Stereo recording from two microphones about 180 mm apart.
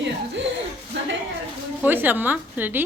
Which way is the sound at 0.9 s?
75° right (ahead or behind).